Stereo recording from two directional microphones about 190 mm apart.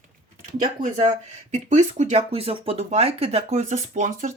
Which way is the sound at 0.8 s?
40° right (ahead or behind).